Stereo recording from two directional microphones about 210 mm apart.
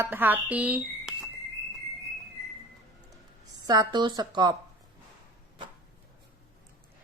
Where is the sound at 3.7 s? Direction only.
20° right (ahead or behind).